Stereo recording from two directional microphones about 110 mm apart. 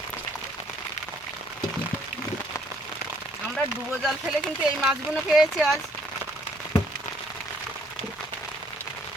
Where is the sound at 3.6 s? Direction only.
Centre (ahead or behind).